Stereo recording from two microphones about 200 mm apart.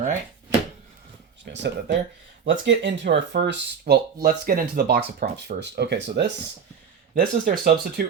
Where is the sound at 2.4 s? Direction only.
65° right (ahead or behind).